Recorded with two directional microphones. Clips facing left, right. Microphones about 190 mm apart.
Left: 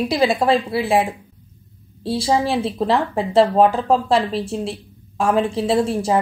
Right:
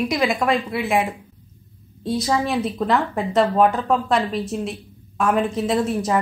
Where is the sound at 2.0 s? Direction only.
30° left (ahead or behind).